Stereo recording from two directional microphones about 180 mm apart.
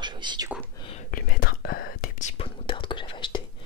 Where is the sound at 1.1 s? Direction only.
55° left (ahead or behind).